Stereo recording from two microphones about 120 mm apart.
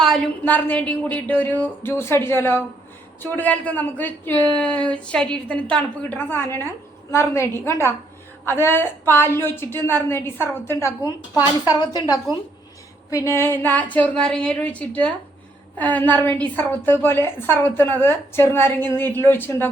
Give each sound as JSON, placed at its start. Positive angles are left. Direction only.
{"t": 0.4, "sound": "a man's voice", "side_deg": 15}
{"t": 13.1, "sound": "a man's voice", "side_deg": 25}